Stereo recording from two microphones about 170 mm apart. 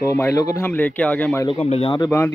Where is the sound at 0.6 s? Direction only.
10° left (ahead or behind).